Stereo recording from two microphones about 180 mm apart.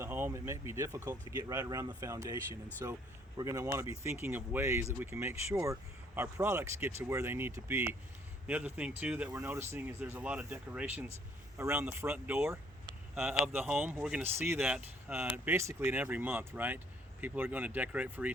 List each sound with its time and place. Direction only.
0.0 s speech: 10° right (ahead or behind)